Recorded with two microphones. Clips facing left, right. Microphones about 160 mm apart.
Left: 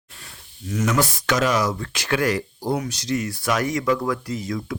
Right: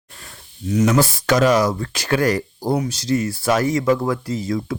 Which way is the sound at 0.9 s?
30° right (ahead or behind).